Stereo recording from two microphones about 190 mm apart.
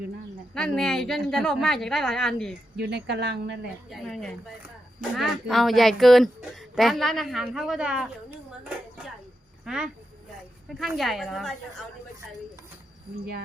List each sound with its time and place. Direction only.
0.5 s speech: 5° left (ahead or behind)
2.7 s speech: 60° right (ahead or behind)
3.8 s speech: centre (ahead or behind)
9.6 s speech: 5° right (ahead or behind)